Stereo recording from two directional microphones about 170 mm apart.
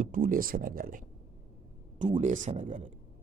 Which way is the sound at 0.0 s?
55° right (ahead or behind).